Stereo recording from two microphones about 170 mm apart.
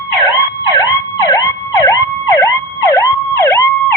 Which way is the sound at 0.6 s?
25° left (ahead or behind).